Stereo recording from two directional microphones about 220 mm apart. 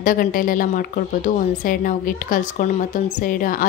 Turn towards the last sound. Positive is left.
turn(degrees=40)  # may be behind; listen again after turning